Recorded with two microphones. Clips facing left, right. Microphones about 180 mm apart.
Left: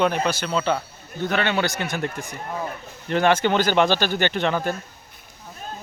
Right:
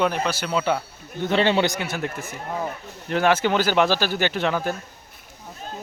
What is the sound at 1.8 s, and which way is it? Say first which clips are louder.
Speech: left 1 dB; 5° right (ahead or behind).